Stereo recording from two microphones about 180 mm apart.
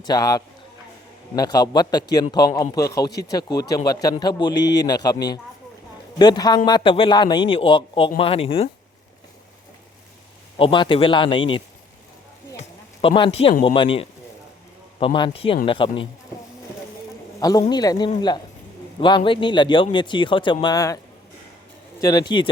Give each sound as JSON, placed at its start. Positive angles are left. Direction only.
{"t": 0.0, "sound": "a man's voice", "side_deg": 20}
{"t": 10.6, "sound": "a man's voice", "side_deg": 25}
{"t": 17.4, "sound": "speech", "side_deg": 20}
{"t": 22.0, "sound": "speech", "side_deg": 20}